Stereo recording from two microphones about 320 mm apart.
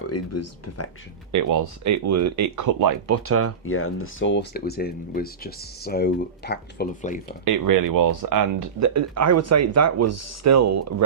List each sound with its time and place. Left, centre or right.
0.1 s speech: left
1.3 s speech: right
3.2 s speech: right
3.7 s speech: left
7.4 s speech: right